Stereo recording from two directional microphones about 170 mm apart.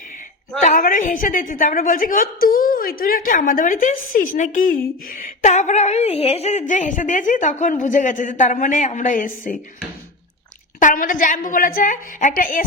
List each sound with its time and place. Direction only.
0.6 s speech: 50° left (ahead or behind)
10.8 s speech: 50° left (ahead or behind)